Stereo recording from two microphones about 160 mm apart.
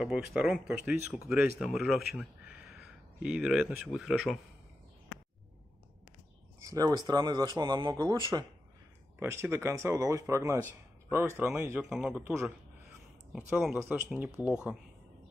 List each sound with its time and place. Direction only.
0.0 s speech: 5° right (ahead or behind)
6.6 s speech: 20° right (ahead or behind)
11.8 s speech: 5° right (ahead or behind)